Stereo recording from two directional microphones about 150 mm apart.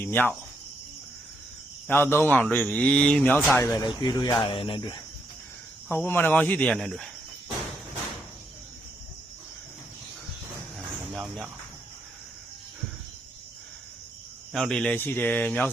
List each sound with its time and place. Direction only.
0.0 s speech: 15° left (ahead or behind)
1.9 s speech: 15° left (ahead or behind)
3.6 s speech: 20° left (ahead or behind)
5.9 s speech: 15° left (ahead or behind)
10.8 s cricket: centre (ahead or behind)
14.5 s speech: 5° left (ahead or behind)